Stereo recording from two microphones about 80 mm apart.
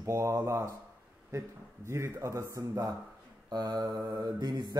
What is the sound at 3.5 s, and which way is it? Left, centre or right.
Mantra, right.